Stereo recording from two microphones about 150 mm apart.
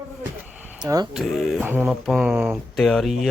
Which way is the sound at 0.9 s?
25° right (ahead or behind).